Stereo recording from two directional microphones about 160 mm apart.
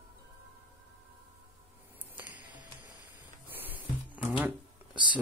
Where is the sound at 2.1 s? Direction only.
10° right (ahead or behind).